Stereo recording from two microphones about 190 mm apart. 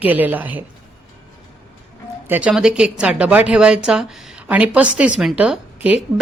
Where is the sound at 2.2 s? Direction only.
10° right (ahead or behind).